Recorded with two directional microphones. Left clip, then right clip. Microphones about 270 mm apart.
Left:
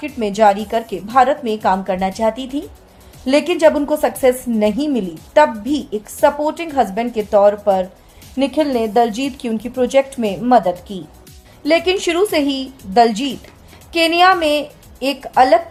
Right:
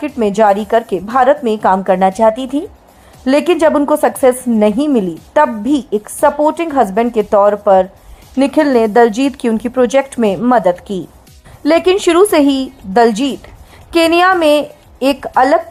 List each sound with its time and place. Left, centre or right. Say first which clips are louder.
0.0 s a woman's voice: right 2 dB; right